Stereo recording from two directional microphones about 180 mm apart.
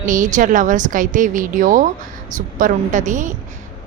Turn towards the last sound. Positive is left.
turn(degrees=-45)  # may be behind; listen again after turning